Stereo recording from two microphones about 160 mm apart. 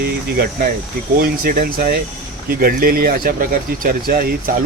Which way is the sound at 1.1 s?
65° right (ahead or behind).